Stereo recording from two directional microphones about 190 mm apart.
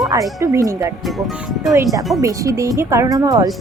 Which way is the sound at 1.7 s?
20° right (ahead or behind).